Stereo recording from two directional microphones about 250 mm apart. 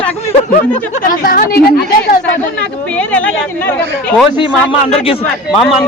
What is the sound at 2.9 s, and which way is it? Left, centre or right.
Speech, centre.